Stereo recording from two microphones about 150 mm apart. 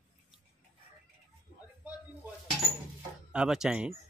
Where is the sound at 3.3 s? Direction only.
5° right (ahead or behind).